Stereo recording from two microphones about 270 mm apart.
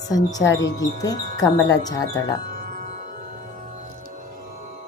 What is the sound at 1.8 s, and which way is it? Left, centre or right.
Music, centre.